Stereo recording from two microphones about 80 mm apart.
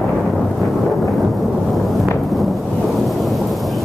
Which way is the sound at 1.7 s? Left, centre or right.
Centre.